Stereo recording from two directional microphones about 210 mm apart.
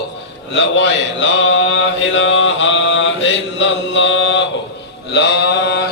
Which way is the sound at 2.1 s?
65° left (ahead or behind).